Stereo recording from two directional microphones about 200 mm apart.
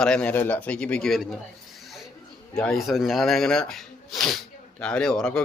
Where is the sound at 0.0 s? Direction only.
5° left (ahead or behind).